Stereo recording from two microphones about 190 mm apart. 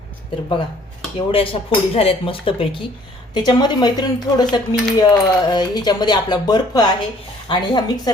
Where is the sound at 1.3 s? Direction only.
30° left (ahead or behind).